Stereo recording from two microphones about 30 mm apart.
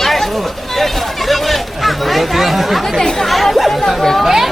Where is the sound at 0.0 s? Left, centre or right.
Centre.